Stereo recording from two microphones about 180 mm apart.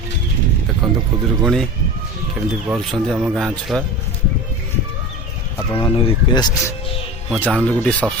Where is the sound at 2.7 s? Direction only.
Centre (ahead or behind).